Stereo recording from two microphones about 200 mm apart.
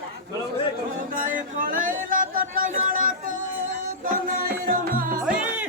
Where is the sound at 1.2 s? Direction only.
45° right (ahead or behind).